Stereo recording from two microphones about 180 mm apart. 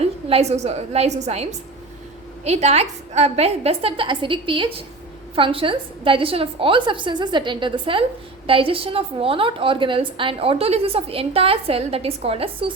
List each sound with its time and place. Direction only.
0.0 s a woman's voice: 35° right (ahead or behind)